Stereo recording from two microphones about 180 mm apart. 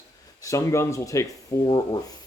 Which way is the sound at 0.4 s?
15° left (ahead or behind).